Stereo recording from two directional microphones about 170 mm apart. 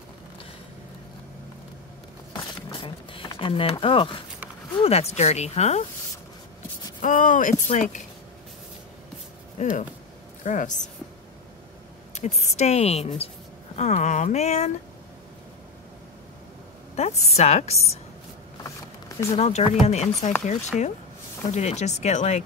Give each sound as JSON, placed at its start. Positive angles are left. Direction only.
{"t": 2.7, "sound": "a sound", "side_deg": 30}
{"t": 4.7, "sound": "a woman's voice", "side_deg": 35}
{"t": 7.0, "sound": "speech", "side_deg": 50}
{"t": 9.6, "sound": "speech", "side_deg": 45}
{"t": 12.1, "sound": "a woman's voice", "side_deg": 40}
{"t": 16.9, "sound": "a woman's voice", "side_deg": 40}
{"t": 19.2, "sound": "a woman's voice", "side_deg": 40}
{"t": 21.5, "sound": "a woman's voice", "side_deg": 40}